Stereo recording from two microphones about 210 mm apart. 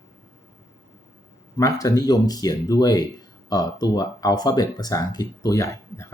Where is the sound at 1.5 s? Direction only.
15° left (ahead or behind).